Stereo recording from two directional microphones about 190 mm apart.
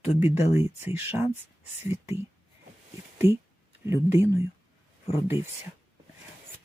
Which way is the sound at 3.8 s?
15° right (ahead or behind).